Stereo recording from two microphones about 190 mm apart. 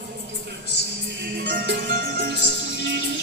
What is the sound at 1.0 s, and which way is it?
Music, 60° right (ahead or behind).